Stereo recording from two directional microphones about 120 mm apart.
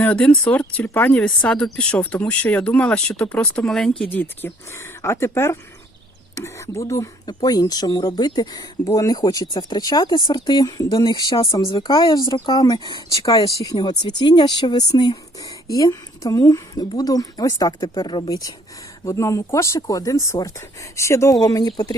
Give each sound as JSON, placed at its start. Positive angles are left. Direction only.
{"t": 0.0, "sound": "speech", "side_deg": 10}
{"t": 4.1, "sound": "speech", "side_deg": 15}
{"t": 10.8, "sound": "speech", "side_deg": 45}